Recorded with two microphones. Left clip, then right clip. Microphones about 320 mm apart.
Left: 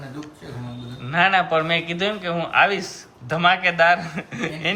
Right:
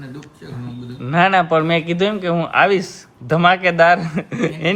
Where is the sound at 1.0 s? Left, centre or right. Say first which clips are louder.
Right 4 dB; centre.